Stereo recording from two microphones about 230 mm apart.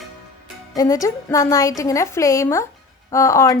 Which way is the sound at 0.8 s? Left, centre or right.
Centre.